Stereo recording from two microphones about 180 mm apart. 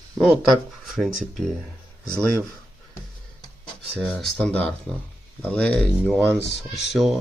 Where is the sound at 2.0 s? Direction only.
5° left (ahead or behind).